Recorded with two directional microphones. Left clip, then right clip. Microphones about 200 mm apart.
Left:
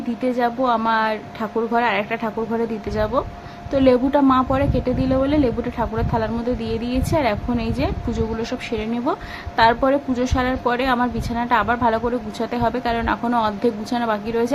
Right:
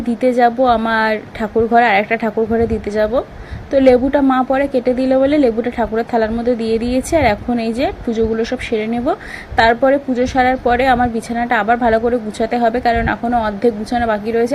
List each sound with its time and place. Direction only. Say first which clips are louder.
0.2 s a woman's voice: right 8 dB; 20° right (ahead or behind)